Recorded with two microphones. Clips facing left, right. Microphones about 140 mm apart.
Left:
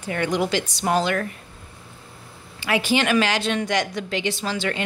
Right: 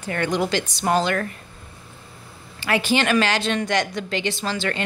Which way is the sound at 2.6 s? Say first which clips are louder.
Even; 10° left (ahead or behind).